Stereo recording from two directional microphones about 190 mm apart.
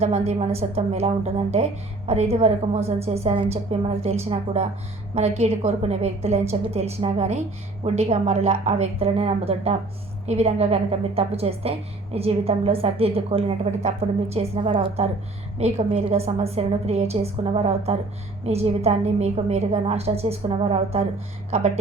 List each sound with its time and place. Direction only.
0.0 s a woman's voice: 35° right (ahead or behind)